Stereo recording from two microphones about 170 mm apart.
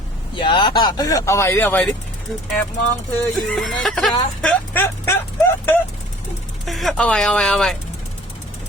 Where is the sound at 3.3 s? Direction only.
Centre (ahead or behind).